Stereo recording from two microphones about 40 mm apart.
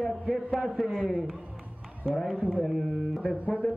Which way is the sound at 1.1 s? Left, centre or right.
Right.